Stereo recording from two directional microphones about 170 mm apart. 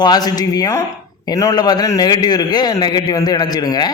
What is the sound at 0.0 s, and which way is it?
Speech, 25° left (ahead or behind).